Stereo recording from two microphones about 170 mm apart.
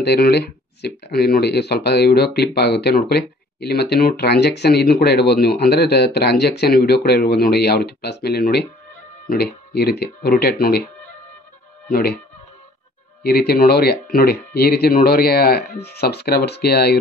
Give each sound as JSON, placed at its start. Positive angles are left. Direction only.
{"t": 0.0, "sound": "speech", "side_deg": 70}
{"t": 13.2, "sound": "speech", "side_deg": 65}